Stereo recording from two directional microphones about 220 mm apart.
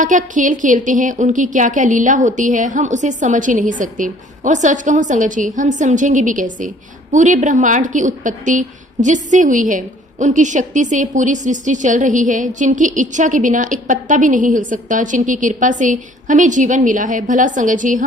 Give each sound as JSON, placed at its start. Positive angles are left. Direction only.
{"t": 0.0, "sound": "a woman's voice", "side_deg": -35}